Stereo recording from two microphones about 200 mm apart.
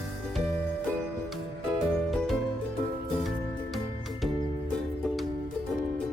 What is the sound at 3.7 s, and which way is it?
Music, centre (ahead or behind).